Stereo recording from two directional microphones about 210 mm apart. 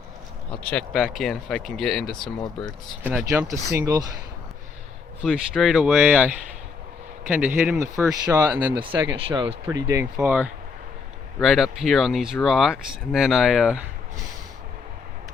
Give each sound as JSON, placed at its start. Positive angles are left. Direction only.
{"t": 0.6, "sound": "speech", "side_deg": 5}
{"t": 5.2, "sound": "speech", "side_deg": 0}
{"t": 9.1, "sound": "speech", "side_deg": -25}